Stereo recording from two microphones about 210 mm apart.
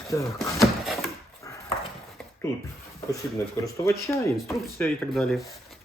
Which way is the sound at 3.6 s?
15° left (ahead or behind).